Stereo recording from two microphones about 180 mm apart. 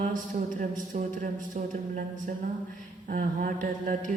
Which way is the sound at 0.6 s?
45° right (ahead or behind).